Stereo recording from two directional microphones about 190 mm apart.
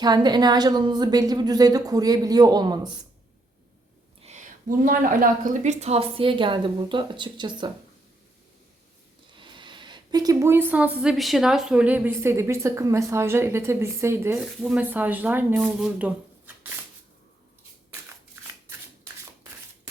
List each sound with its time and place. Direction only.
0.0 s a woman's voice: 20° right (ahead or behind)
4.2 s a sound: 35° right (ahead or behind)
4.9 s a woman's voice: 45° right (ahead or behind); by 7.7 s 25° right (ahead or behind)
9.4 s a woman's voice: 25° right (ahead or behind); by 16.1 s 5° right (ahead or behind)